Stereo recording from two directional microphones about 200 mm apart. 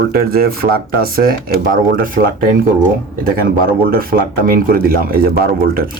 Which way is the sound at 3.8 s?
45° right (ahead or behind).